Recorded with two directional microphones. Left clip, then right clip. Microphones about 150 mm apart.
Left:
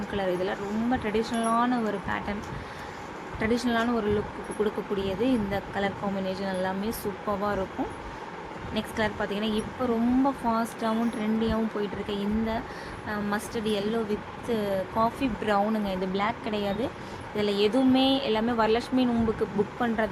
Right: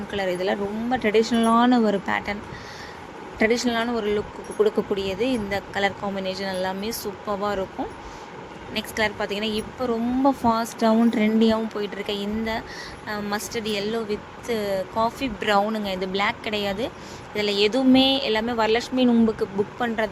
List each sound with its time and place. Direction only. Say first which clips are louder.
0.1 s speech: right 4 dB; 45° right (ahead or behind)
3.3 s speech: right 5 dB; 50° right (ahead or behind)
8.7 s speech: right 4 dB; 50° right (ahead or behind)